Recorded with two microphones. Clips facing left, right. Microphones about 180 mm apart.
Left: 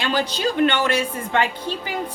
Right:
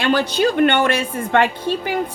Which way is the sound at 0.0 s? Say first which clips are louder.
Right 5 dB; 60° right (ahead or behind).